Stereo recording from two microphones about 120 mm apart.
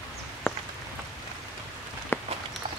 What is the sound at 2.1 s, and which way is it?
Walk, 20° left (ahead or behind).